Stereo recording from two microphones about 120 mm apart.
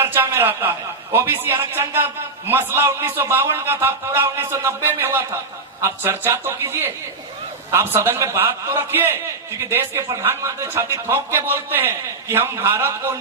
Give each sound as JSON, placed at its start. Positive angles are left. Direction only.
{"t": 0.0, "sound": "a man's voice", "side_deg": -20}